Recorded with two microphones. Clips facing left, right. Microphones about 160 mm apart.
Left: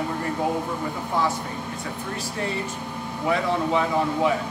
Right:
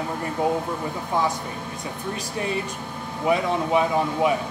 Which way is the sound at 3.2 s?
15° right (ahead or behind).